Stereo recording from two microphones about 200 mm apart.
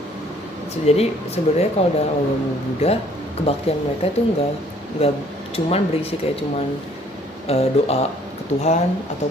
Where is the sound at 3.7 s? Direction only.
30° left (ahead or behind).